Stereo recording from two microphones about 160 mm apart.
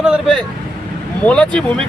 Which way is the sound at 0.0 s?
Centre (ahead or behind).